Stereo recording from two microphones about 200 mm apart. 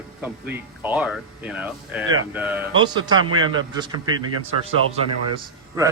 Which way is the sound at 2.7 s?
20° right (ahead or behind).